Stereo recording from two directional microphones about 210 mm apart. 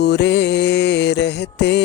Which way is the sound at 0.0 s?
55° left (ahead or behind).